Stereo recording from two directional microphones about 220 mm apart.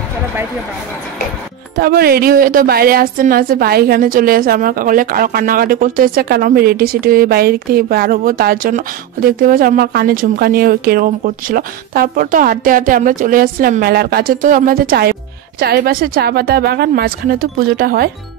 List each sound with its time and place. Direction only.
1.8 s a woman's voice: 45° right (ahead or behind)